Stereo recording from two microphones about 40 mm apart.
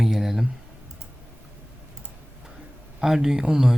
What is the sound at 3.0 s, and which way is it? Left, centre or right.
Speech, centre.